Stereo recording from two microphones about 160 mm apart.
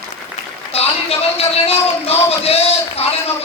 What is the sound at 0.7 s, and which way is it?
A man's voice, 40° left (ahead or behind).